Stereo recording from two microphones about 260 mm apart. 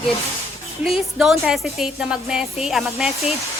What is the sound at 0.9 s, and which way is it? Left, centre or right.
A woman's voice, centre.